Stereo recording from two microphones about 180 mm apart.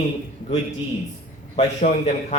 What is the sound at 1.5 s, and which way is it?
Speech, 40° left (ahead or behind).